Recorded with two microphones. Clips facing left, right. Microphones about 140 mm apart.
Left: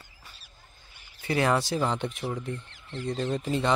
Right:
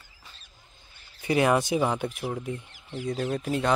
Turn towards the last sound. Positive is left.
turn(degrees=-5)  # may be behind; listen again after turning